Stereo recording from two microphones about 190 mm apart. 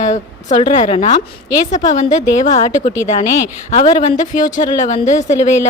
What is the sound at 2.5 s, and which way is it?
A child's voice, 20° left (ahead or behind).